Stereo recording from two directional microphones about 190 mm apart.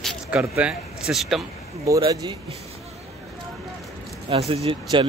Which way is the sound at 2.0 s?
25° right (ahead or behind).